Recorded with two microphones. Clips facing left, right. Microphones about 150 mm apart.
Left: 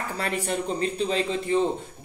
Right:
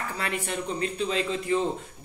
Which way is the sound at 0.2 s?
35° left (ahead or behind).